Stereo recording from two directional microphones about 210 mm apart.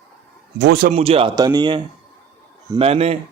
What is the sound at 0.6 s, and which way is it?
Speech, 50° right (ahead or behind).